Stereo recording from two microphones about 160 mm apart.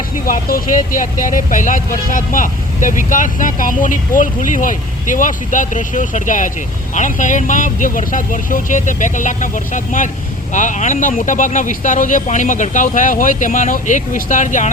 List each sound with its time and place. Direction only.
0.3 s speech: 60° left (ahead or behind)